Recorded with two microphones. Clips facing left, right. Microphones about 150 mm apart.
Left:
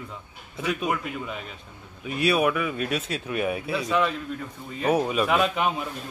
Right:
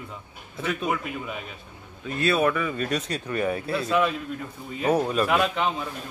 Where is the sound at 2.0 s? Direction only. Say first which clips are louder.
Even; 10° left (ahead or behind).